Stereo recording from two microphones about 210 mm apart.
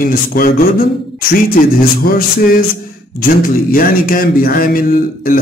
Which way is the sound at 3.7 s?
45° left (ahead or behind).